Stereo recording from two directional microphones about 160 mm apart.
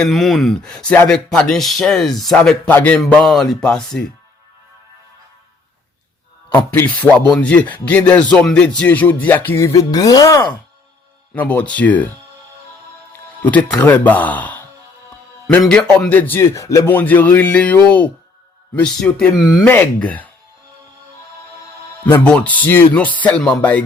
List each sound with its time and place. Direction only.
0.0 s speech: centre (ahead or behind)
6.5 s speech: 10° left (ahead or behind)
11.3 s speech: 10° left (ahead or behind)
13.4 s speech: 10° left (ahead or behind)
22.0 s speech: 10° left (ahead or behind)